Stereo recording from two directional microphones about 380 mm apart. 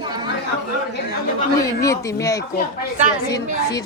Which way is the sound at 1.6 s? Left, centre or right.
Centre.